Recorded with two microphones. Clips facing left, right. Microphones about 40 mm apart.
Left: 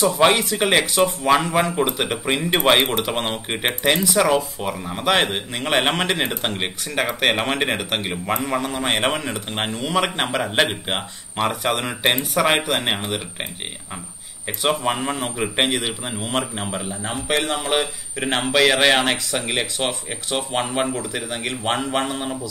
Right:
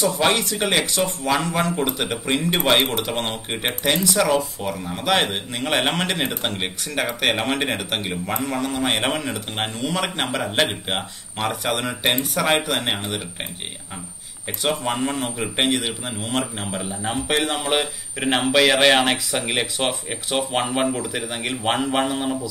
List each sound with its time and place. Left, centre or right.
0.0 s a man's voice: centre
14.6 s a man's voice: centre